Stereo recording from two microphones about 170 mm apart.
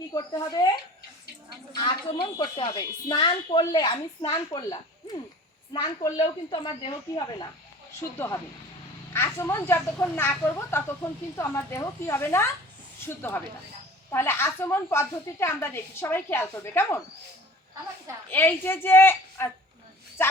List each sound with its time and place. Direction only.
0.1 s a woman's voice: 20° left (ahead or behind)
2.4 s a woman's voice: 25° left (ahead or behind)
9.1 s a woman's voice: 15° left (ahead or behind)
18.3 s a woman's voice: 10° left (ahead or behind)